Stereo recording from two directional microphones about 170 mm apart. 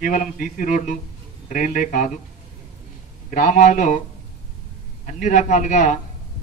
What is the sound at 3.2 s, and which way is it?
Speech, 50° left (ahead or behind).